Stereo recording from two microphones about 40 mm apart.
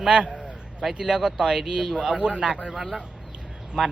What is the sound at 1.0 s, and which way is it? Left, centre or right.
A man's voice, centre.